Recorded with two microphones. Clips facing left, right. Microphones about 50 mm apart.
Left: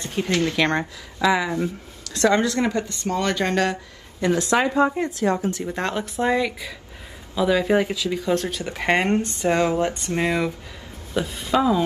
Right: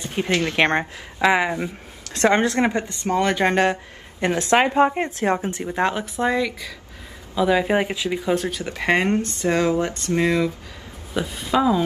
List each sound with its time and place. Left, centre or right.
0.0 s speech: right
4.2 s speech: right
5.8 s speech: centre
6.1 s speech: centre
7.3 s speech: centre
8.2 s speech: centre
9.1 s speech: centre
9.8 s a sound: left
11.1 s speech: centre